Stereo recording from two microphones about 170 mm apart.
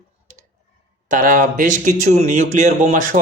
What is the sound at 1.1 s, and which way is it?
A man's voice, 50° right (ahead or behind).